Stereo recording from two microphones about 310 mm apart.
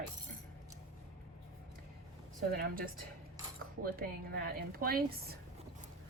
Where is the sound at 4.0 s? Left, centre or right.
Right.